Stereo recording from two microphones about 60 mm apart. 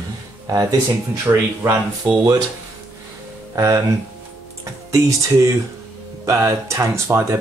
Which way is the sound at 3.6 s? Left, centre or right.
Right.